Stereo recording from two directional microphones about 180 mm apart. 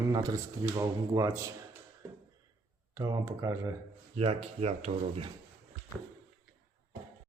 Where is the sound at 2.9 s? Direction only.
20° right (ahead or behind).